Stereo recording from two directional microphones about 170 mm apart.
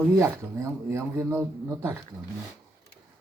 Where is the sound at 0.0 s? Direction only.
15° right (ahead or behind).